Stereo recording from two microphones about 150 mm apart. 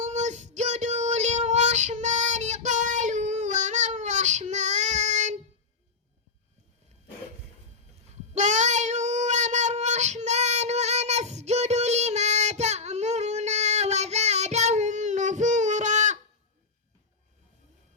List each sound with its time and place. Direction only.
0.0 s child singing: 50° right (ahead or behind)
8.3 s child singing: 50° right (ahead or behind)